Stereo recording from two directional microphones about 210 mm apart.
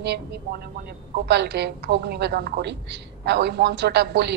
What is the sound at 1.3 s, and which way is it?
A woman's voice, 55° right (ahead or behind).